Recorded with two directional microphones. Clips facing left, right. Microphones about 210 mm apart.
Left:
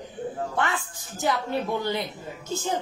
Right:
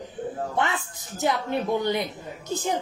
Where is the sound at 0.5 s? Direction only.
20° right (ahead or behind).